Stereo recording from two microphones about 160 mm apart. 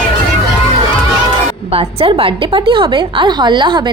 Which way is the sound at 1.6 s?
40° right (ahead or behind).